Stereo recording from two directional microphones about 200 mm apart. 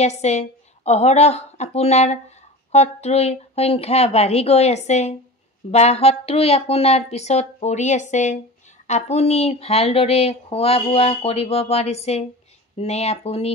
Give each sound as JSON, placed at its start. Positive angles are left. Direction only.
{"t": 0.0, "sound": "speech", "side_deg": 35}